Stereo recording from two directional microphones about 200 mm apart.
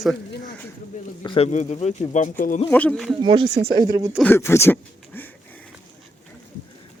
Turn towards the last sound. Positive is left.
turn(degrees=10)  # may be behind; listen again after turning